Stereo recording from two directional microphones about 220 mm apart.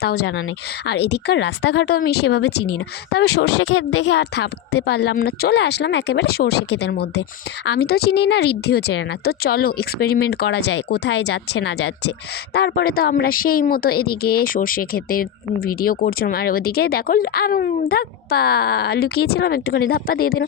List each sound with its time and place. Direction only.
0.0 s a woman's voice: 50° left (ahead or behind)